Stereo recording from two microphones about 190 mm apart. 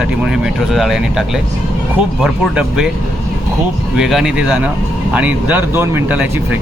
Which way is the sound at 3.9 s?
Centre (ahead or behind).